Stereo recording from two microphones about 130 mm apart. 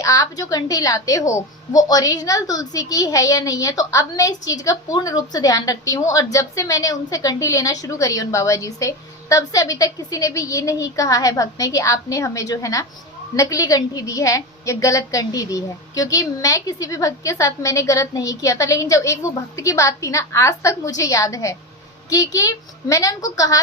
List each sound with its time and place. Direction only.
0.0 s a woman's voice: 25° left (ahead or behind)